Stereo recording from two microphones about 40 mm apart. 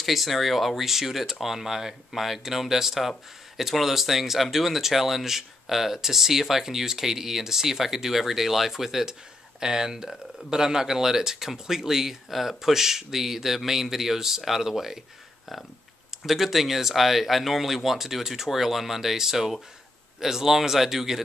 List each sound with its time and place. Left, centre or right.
0.0 s speech: centre
16.2 s speech: centre